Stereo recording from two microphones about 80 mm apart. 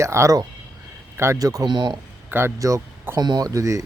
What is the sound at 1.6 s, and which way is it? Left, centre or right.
Speech, right.